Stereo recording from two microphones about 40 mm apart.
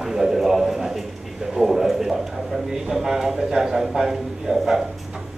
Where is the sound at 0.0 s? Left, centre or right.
Centre.